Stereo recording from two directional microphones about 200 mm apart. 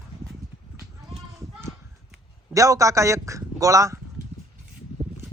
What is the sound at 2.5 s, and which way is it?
A man's voice, 15° right (ahead or behind).